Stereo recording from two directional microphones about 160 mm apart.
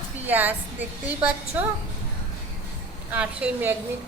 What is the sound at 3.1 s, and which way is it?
Speech, 10° right (ahead or behind).